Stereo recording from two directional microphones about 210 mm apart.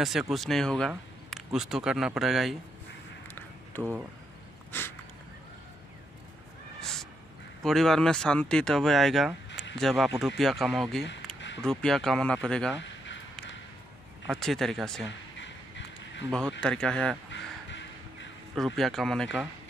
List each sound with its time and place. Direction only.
0.0 s speech: centre (ahead or behind)
4.7 s a sound: 10° left (ahead or behind)
6.8 s cat: centre (ahead or behind)
7.6 s speech: centre (ahead or behind)
12.8 s a sound: 60° left (ahead or behind)
14.2 s speech: centre (ahead or behind)
15.3 s a sound: 60° left (ahead or behind)
16.3 s speech: 5° left (ahead or behind)
17.3 s crow: 60° left (ahead or behind)
18.5 s speech: centre (ahead or behind)